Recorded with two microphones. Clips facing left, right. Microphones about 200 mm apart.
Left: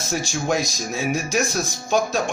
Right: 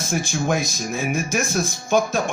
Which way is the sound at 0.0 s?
55° right (ahead or behind).